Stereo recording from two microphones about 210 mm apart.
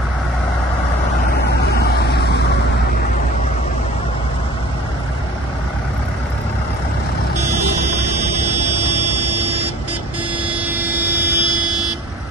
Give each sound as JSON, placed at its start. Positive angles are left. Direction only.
{"t": 1.3, "sound": "vehicle", "side_deg": 50}
{"t": 10.5, "sound": "vehicle", "side_deg": -10}